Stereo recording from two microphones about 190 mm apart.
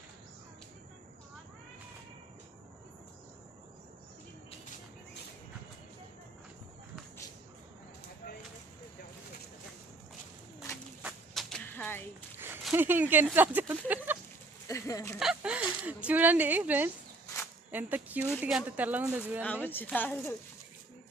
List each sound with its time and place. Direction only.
10.6 s walk: 15° left (ahead or behind)
11.0 s a sound: centre (ahead or behind)
12.7 s speech: 10° right (ahead or behind)
14.7 s a woman's voice: 15° left (ahead or behind)
15.2 s speech: 5° right (ahead or behind)
19.6 s a woman's voice: 10° left (ahead or behind)